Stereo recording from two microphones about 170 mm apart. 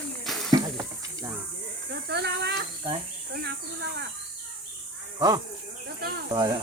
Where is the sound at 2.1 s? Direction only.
80° right.